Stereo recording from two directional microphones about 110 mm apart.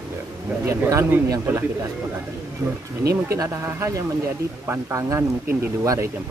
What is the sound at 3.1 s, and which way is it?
Speech, 30° right (ahead or behind).